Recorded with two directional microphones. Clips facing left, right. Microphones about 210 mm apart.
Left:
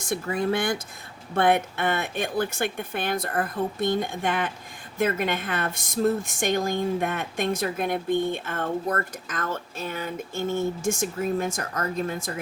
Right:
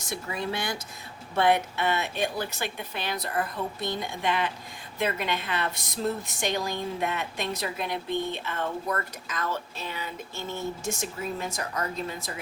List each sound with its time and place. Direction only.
0.0 s speech: 50° left (ahead or behind)